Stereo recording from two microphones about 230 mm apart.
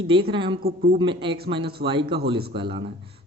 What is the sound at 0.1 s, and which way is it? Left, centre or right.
Speech, right.